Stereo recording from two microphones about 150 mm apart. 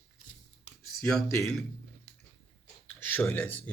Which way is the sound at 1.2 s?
20° left (ahead or behind).